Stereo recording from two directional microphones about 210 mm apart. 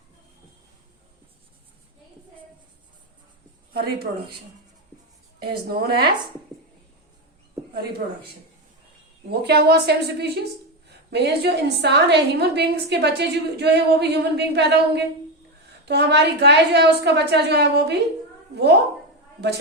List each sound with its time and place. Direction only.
3.7 s a woman's voice: 50° right (ahead or behind)
5.4 s a woman's voice: 45° right (ahead or behind)
8.0 s speech: 35° right (ahead or behind)
9.3 s a woman's voice: 50° right (ahead or behind)